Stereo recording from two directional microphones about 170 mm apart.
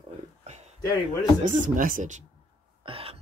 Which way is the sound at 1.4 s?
50° right (ahead or behind).